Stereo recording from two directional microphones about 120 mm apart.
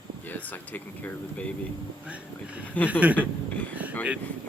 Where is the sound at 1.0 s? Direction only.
10° left (ahead or behind).